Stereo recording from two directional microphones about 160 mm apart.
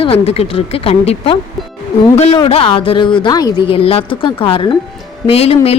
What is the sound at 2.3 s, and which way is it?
A woman's voice, 35° left (ahead or behind).